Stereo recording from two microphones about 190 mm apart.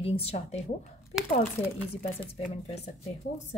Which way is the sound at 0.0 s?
30° left (ahead or behind).